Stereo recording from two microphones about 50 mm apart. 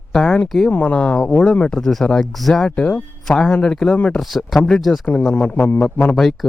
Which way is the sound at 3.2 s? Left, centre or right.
Centre.